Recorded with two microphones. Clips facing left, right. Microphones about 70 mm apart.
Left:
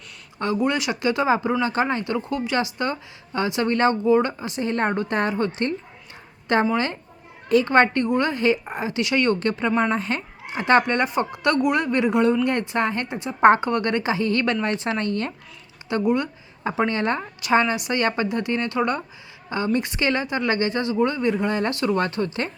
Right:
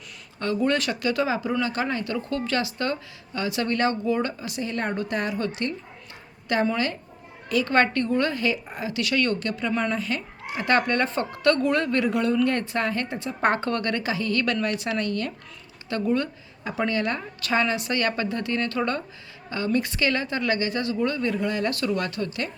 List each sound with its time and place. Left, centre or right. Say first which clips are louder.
0.3 s speech: left 1 dB; centre
1.0 s a woman's voice: left 7 dB; left
15.9 s a woman's voice: left 3 dB; centre
16.6 s a woman's voice: left 3 dB; left